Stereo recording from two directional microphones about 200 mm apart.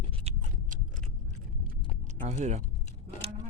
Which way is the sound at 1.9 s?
35° right (ahead or behind).